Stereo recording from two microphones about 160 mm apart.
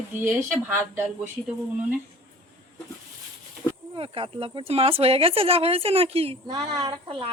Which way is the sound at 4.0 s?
35° right (ahead or behind).